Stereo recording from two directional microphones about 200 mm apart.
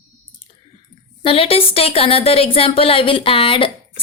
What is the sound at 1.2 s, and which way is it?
A woman's voice, 30° left (ahead or behind).